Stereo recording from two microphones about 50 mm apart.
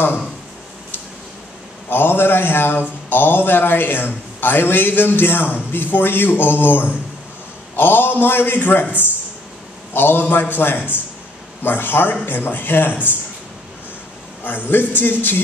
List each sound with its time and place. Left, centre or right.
1.9 s a man's voice: left
14.4 s a man's voice: left